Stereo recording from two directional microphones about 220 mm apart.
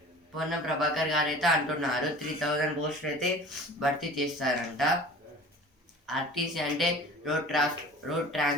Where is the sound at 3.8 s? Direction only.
Centre (ahead or behind).